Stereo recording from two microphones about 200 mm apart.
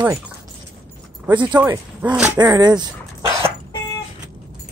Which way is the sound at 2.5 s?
20° right (ahead or behind).